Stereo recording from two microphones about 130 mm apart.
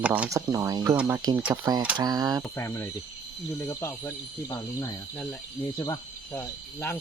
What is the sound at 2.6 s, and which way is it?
Speech, 20° left (ahead or behind).